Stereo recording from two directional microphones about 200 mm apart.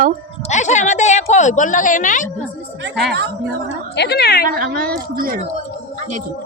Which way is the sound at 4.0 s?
55° left (ahead or behind).